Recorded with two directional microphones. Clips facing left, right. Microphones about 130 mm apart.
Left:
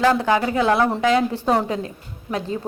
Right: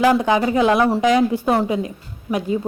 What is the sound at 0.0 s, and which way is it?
A woman's voice, 15° right (ahead or behind).